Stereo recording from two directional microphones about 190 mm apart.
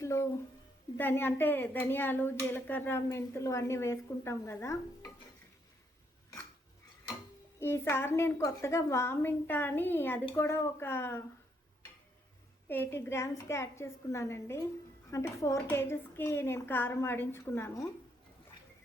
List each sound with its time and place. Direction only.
0.0 s a sound: 15° left (ahead or behind)
0.9 s a woman's voice: 10° left (ahead or behind)
7.6 s a woman's voice: 10° left (ahead or behind)
12.6 s a woman's voice: 10° left (ahead or behind)